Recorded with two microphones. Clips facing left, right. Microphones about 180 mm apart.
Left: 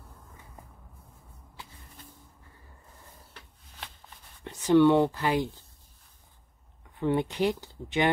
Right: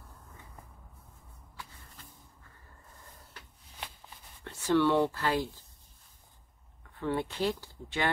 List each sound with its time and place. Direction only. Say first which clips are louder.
4.5 s speech: left 6 dB; 15° left (ahead or behind)
7.0 s speech: left 5 dB; 15° left (ahead or behind)